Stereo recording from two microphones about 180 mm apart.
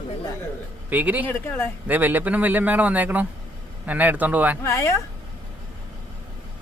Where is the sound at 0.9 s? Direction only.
10° right (ahead or behind).